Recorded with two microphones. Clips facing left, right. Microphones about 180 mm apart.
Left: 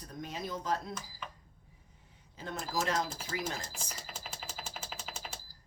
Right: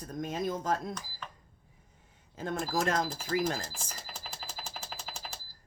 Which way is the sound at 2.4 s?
50° right (ahead or behind).